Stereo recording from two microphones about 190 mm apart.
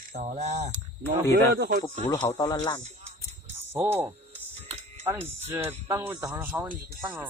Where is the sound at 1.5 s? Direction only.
55° right (ahead or behind).